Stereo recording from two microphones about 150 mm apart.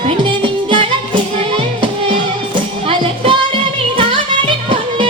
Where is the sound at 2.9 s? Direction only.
35° right (ahead or behind).